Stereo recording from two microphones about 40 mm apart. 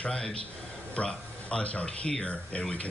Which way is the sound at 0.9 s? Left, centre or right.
Left.